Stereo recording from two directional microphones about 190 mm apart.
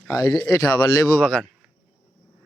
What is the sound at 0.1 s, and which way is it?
Speech, 20° left (ahead or behind).